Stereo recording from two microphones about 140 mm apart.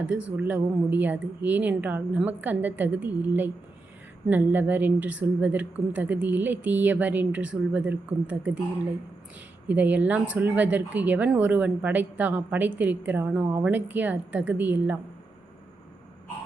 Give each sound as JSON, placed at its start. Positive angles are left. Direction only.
{"t": 0.0, "sound": "speech", "side_deg": -10}
{"t": 9.6, "sound": "speech", "side_deg": -10}